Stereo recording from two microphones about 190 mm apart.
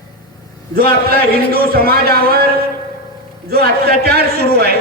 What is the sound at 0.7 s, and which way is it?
A man's voice, 50° right (ahead or behind).